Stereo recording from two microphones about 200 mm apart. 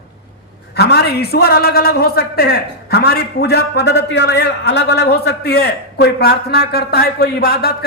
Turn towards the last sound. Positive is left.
turn(degrees=50)  # may be behind; listen again after turning